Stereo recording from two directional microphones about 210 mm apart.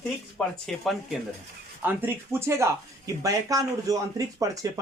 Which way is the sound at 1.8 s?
10° right (ahead or behind).